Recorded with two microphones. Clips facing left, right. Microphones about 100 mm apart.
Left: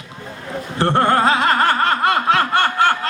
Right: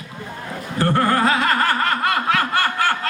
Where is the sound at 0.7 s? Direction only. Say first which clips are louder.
Left 2 dB; 25° left (ahead or behind).